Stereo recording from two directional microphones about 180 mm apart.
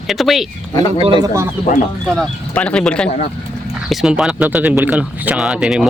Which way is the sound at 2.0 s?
5° left (ahead or behind).